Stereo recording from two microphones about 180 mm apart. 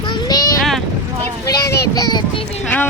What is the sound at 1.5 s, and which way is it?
Speech, 20° left (ahead or behind).